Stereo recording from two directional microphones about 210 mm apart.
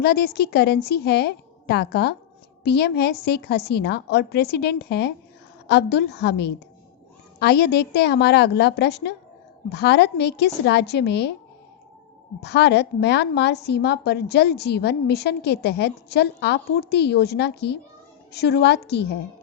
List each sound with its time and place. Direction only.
0.0 s a woman's voice: 50° left (ahead or behind)
12.4 s a woman's voice: 55° left (ahead or behind)